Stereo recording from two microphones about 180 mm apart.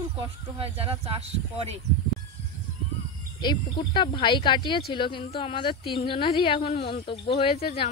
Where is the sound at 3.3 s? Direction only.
25° left (ahead or behind).